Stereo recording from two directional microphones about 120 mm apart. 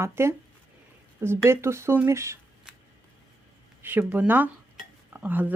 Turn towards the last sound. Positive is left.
turn(degrees=-15)  # may be behind; listen again after turning